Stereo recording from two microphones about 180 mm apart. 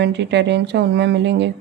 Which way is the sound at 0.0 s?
70° right (ahead or behind).